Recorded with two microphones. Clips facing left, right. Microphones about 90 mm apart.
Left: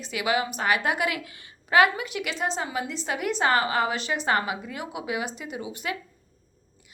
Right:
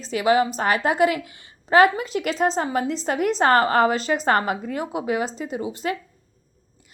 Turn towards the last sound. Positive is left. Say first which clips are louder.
# right 6 dB
turn(degrees=-35)  # may be behind; listen again after turning